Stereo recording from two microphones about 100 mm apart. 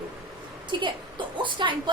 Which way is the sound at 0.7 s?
55° right (ahead or behind).